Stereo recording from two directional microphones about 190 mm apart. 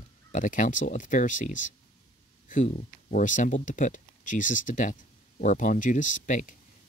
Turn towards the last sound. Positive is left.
turn(degrees=40)  # may be behind; listen again after turning